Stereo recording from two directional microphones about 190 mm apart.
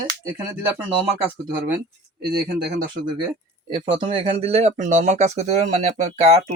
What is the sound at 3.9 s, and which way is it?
Speech, 30° right (ahead or behind).